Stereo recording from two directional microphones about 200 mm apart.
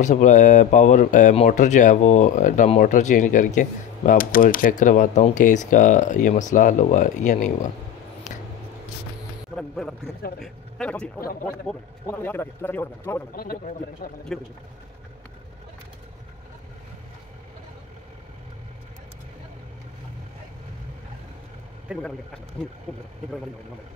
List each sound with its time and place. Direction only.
0.0 s speech: 40° left (ahead or behind)
9.6 s a sound: 5° left (ahead or behind)
10.4 s speech: 5° left (ahead or behind)
12.1 s speech: 10° left (ahead or behind)
13.3 s a man's voice: 45° left (ahead or behind)
14.3 s speech: 5° left (ahead or behind)
21.9 s speech: 5° right (ahead or behind)